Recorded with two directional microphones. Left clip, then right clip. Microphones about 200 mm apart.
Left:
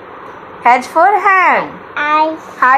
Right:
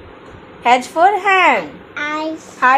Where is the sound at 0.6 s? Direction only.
Centre (ahead or behind).